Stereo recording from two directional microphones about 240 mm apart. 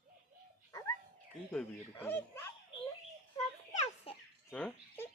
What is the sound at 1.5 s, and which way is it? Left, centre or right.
Speech, centre.